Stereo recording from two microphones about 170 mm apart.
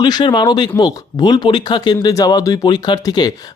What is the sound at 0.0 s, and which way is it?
Speech, 25° left (ahead or behind).